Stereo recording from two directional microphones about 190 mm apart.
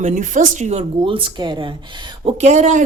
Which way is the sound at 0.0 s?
40° right (ahead or behind).